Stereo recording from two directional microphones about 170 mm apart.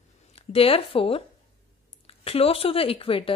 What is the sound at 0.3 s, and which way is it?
A woman's voice, 35° left (ahead or behind).